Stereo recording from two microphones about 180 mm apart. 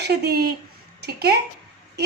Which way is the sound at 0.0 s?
65° right (ahead or behind).